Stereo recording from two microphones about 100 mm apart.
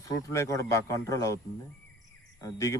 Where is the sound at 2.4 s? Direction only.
35° left (ahead or behind).